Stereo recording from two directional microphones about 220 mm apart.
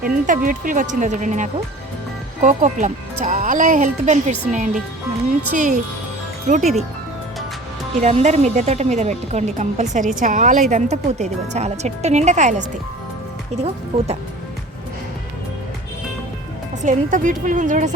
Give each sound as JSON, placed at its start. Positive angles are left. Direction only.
{"t": 0.0, "sound": "speech", "side_deg": -40}
{"t": 8.0, "sound": "speech", "side_deg": -30}
{"t": 16.8, "sound": "speech", "side_deg": -35}